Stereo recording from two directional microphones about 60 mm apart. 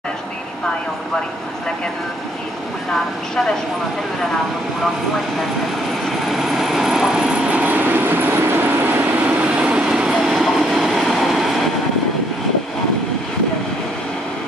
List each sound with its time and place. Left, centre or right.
6.2 s vehicle: centre; by 9.5 s right
9.6 s train: centre
10.3 s train: centre